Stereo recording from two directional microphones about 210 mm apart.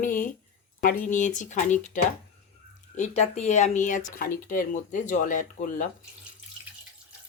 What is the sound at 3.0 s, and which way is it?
Speech, 30° left (ahead or behind).